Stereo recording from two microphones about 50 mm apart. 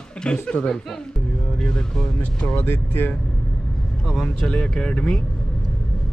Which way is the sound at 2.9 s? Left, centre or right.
Left.